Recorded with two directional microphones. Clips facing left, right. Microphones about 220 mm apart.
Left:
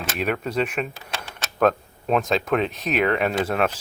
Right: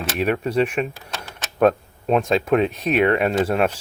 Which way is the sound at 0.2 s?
5° right (ahead or behind).